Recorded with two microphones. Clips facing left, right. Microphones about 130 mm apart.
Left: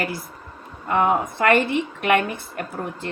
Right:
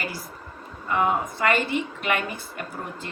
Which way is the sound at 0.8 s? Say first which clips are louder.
Left 4 dB; 55° left (ahead or behind).